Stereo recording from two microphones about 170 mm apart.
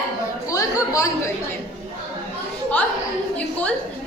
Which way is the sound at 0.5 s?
20° left (ahead or behind).